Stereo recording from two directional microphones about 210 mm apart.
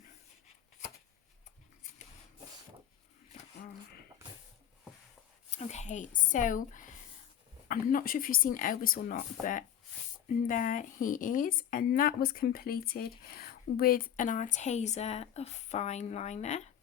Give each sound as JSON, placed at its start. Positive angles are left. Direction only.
{"t": 5.5, "sound": "a woman's voice", "side_deg": 30}